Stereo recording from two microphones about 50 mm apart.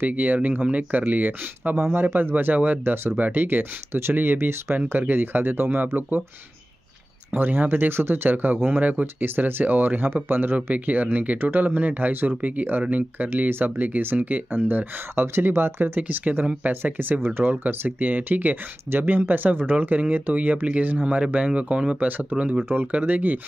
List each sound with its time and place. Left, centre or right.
0.0 s speech: right
2.0 s speech: right
2.3 s speech: right
4.9 s speech: right
7.2 s speech: right
16.0 s speech: right
22.1 s speech: right